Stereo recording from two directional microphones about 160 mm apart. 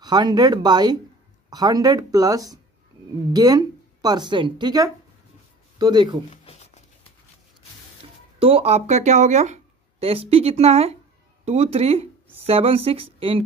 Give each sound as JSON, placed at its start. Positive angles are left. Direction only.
{"t": 0.0, "sound": "speech", "side_deg": -25}
{"t": 6.3, "sound": "a sound", "side_deg": 45}
{"t": 8.4, "sound": "speech", "side_deg": -35}